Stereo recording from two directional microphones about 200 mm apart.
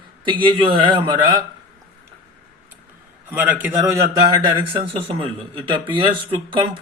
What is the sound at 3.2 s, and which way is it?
A man's voice, 10° right (ahead or behind).